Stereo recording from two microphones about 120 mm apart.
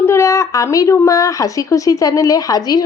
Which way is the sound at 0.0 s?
20° left (ahead or behind).